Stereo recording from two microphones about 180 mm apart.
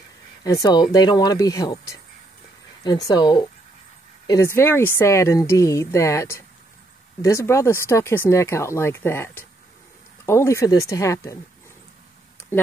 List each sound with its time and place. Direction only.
0.4 s speech: 20° left (ahead or behind)
3.1 s speech: 25° left (ahead or behind)